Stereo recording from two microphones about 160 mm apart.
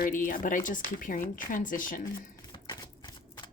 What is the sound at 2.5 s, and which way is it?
Typewriter, 25° left (ahead or behind).